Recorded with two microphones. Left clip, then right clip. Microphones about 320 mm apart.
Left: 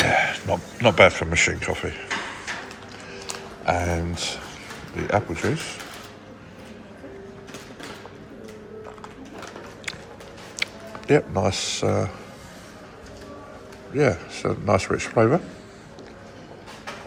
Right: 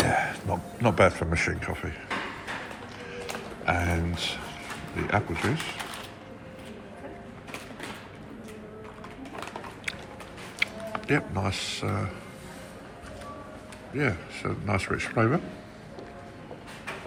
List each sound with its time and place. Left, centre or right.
0.0 s speech: centre
3.7 s speech: centre
10.6 s speech: centre
13.9 s a man's voice: centre